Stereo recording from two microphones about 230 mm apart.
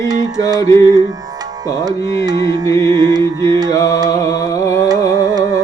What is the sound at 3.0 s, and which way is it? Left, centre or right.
Music, centre.